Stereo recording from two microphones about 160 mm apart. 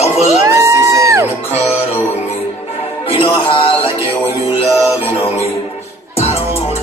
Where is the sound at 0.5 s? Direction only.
20° right (ahead or behind).